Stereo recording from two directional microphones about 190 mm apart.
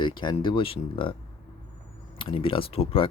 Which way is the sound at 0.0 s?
25° left (ahead or behind).